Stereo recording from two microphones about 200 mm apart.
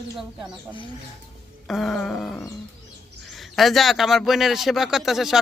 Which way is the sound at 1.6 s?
Centre (ahead or behind).